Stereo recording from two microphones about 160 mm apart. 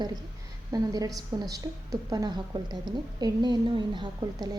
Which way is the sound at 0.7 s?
25° right (ahead or behind).